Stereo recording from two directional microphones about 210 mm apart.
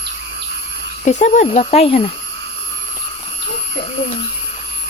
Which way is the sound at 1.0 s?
35° left (ahead or behind).